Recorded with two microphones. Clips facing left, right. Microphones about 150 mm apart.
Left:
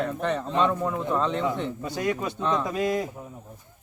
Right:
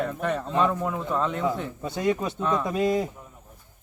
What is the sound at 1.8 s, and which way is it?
Speech, 20° right (ahead or behind).